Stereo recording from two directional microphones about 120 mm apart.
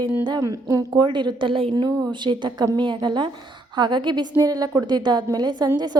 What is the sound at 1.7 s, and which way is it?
A woman's voice, 35° right (ahead or behind).